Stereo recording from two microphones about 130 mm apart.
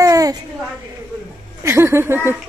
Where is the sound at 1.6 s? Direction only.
20° right (ahead or behind).